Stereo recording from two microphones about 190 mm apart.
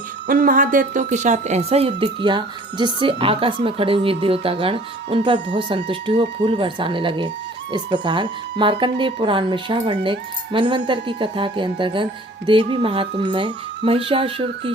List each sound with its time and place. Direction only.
0.3 s a woman's voice: 45° right (ahead or behind); by 14.7 s 30° right (ahead or behind)